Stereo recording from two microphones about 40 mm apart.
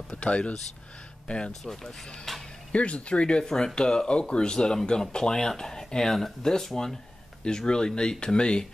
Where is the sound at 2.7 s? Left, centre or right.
Left.